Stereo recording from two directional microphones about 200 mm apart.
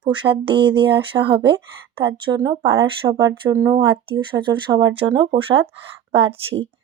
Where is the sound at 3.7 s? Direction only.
25° right (ahead or behind).